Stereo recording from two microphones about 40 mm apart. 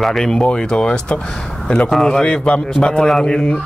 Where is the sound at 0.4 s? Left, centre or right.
Centre.